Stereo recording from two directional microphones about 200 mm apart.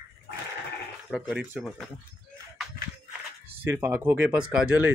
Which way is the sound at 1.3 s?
5° right (ahead or behind).